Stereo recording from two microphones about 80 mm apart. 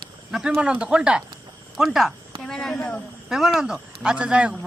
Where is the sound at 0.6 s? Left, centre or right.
Centre.